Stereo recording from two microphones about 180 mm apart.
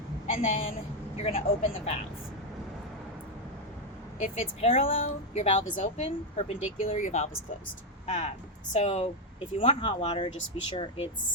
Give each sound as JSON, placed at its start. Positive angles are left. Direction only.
{"t": 0.3, "sound": "a woman's voice", "side_deg": 35}
{"t": 4.6, "sound": "speech", "side_deg": 35}